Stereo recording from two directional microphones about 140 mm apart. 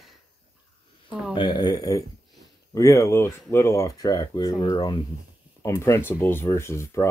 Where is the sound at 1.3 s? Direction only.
30° left (ahead or behind).